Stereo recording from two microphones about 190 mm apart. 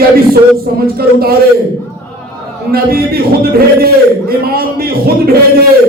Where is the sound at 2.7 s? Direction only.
55° right (ahead or behind).